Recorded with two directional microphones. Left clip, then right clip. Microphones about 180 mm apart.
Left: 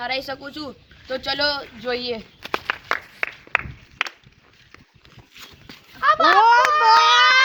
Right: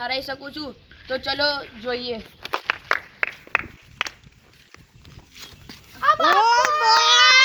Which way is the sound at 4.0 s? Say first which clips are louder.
Left 2 dB; 85° right.